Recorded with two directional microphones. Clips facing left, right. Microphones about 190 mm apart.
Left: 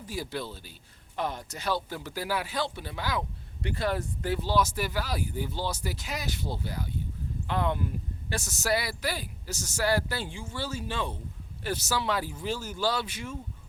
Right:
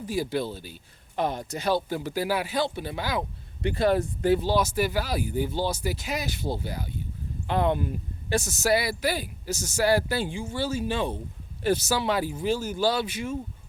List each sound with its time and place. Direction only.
0.1 s speech: 15° right (ahead or behind)